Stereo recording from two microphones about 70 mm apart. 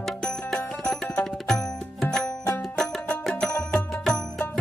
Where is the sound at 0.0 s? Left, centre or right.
Centre.